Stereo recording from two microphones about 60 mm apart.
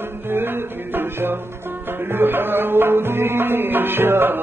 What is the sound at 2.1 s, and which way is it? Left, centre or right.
Music, right.